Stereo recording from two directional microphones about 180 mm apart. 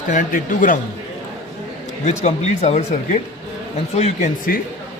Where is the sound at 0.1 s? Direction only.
45° left (ahead or behind).